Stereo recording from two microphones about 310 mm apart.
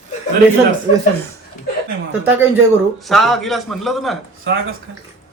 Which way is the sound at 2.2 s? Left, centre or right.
Centre.